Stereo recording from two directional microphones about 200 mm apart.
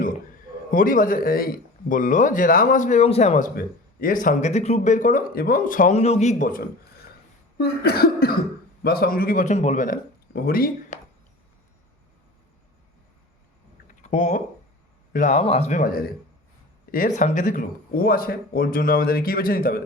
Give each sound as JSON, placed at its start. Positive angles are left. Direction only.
{"t": 0.7, "sound": "speech", "side_deg": 40}
{"t": 7.6, "sound": "speech", "side_deg": 50}
{"t": 14.0, "sound": "speech", "side_deg": 35}